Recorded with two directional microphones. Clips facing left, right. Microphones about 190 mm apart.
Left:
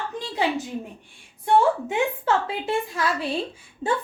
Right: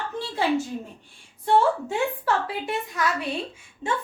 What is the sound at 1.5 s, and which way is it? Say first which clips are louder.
A woman's voice: left 1 dB; 15° left (ahead or behind).